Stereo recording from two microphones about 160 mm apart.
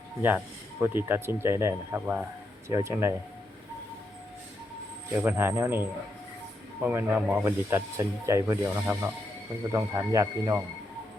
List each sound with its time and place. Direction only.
0.2 s speech: 10° right (ahead or behind)
5.1 s speech: 10° right (ahead or behind)